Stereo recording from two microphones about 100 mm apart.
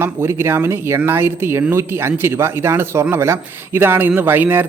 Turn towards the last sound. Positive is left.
turn(degrees=-20)  # may be behind; listen again after turning